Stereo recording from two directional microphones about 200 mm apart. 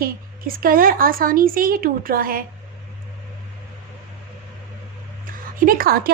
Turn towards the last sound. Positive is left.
turn(degrees=-50)  # may be behind; listen again after turning